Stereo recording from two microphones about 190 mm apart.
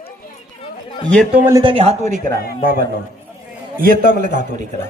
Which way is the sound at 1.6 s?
30° right (ahead or behind).